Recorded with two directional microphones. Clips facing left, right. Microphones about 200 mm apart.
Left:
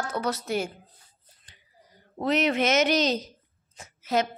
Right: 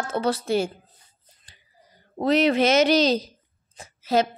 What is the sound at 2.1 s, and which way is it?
Speech, 35° right (ahead or behind).